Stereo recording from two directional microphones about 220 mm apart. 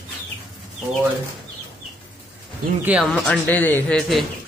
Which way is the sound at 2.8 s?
5° right (ahead or behind).